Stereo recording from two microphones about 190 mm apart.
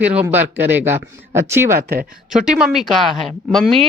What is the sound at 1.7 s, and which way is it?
Speech, 50° right (ahead or behind).